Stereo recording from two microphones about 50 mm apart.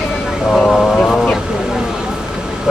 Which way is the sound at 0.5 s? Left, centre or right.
Centre.